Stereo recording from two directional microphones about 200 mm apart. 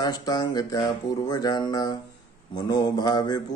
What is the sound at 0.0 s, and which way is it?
Speech, 20° left (ahead or behind).